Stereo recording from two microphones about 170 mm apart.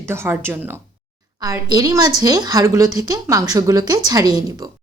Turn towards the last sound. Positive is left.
turn(degrees=-20)  # may be behind; listen again after turning